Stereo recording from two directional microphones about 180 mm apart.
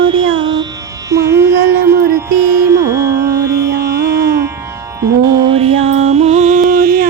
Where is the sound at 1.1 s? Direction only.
15° right (ahead or behind).